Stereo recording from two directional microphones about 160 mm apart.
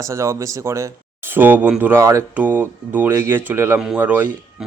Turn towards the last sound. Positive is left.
turn(degrees=-10)  # may be behind; listen again after turning